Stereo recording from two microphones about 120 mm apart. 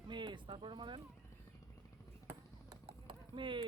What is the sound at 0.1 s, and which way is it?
Speech, 40° right (ahead or behind).